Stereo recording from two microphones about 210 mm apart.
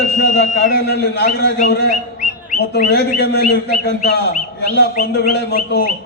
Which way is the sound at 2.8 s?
50° left (ahead or behind).